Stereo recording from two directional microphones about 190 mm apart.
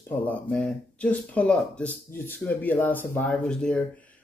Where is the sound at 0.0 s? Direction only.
10° left (ahead or behind).